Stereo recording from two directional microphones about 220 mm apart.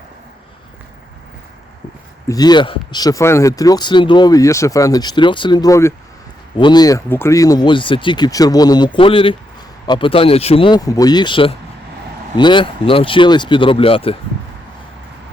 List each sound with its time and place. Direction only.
2.2 s speech: 15° left (ahead or behind)